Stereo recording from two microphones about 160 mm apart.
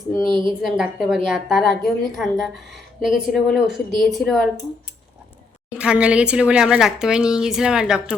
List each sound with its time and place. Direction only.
0.3 s speech: 30° right (ahead or behind)
0.8 s a woman's voice: 5° right (ahead or behind)
5.7 s a woman's voice: 5° right (ahead or behind)